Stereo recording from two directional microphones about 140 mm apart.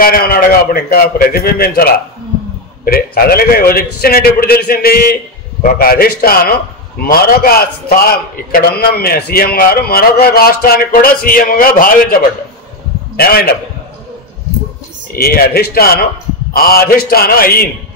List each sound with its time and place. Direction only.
0.0 s a man's voice: 90° left
15.1 s a man's voice: 90° left